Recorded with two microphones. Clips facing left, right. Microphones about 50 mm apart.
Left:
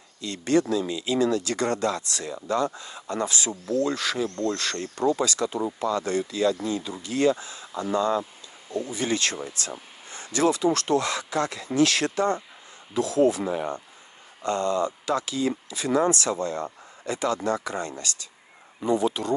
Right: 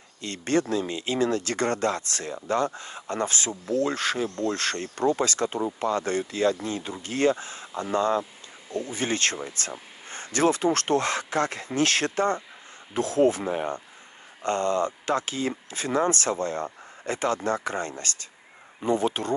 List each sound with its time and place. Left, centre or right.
0.2 s speech: right